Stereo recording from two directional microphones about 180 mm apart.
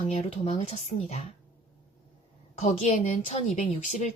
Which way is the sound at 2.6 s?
40° left (ahead or behind).